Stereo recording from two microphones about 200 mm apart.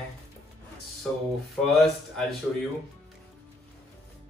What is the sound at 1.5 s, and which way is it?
Speech, centre (ahead or behind).